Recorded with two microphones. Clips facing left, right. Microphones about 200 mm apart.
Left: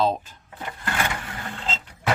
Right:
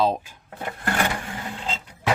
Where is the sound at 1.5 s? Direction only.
10° right (ahead or behind).